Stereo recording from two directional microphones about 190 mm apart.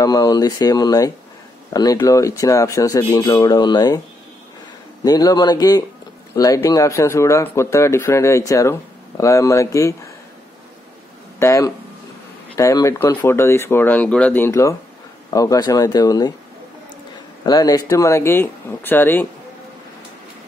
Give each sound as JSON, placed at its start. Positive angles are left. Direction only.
{"t": 0.0, "sound": "speech", "side_deg": 20}
{"t": 5.0, "sound": "speech", "side_deg": 20}
{"t": 11.3, "sound": "speech", "side_deg": 15}
{"t": 17.5, "sound": "speech", "side_deg": 20}